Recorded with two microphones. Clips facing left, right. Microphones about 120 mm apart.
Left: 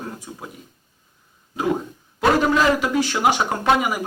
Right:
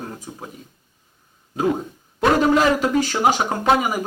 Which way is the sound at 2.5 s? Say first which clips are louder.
Right 1 dB; 45° right (ahead or behind).